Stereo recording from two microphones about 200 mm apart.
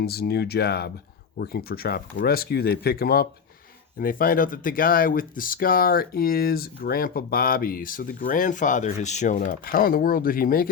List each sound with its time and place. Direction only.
0.0 s speech: 50° left (ahead or behind)